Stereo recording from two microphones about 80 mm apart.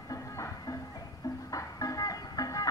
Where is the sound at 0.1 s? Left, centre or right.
Left.